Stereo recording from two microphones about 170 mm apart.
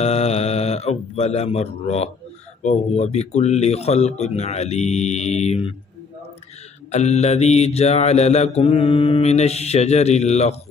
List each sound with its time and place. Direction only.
0.0 s speech: 35° left (ahead or behind)
2.6 s mantra: 40° left (ahead or behind)
6.9 s mantra: 40° left (ahead or behind)